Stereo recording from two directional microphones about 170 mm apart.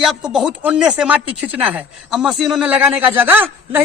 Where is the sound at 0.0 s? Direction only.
Centre (ahead or behind).